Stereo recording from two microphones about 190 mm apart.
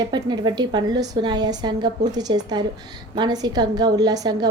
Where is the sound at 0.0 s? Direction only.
20° right (ahead or behind).